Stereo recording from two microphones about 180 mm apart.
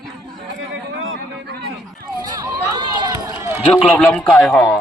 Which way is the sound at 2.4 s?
20° right (ahead or behind).